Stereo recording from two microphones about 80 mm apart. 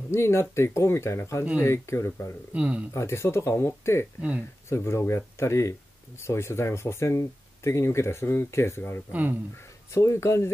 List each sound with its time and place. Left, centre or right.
0.1 s speech: left
2.5 s speech: centre
2.9 s speech: left